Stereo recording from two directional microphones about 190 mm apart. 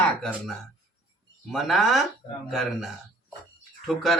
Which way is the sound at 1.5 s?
Centre (ahead or behind).